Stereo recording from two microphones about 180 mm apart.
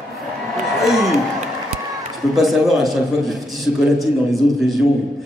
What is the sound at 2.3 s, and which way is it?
A man's voice, centre (ahead or behind).